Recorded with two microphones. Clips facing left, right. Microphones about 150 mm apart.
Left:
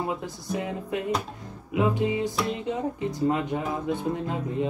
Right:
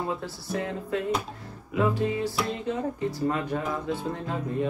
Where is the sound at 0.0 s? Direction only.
15° left (ahead or behind).